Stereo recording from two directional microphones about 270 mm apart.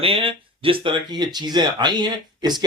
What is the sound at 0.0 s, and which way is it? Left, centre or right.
Speech, centre.